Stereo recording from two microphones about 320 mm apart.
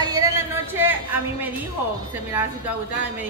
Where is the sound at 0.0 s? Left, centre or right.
Centre.